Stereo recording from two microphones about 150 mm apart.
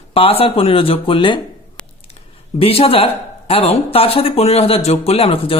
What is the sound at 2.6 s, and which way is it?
A man's voice, 40° left (ahead or behind).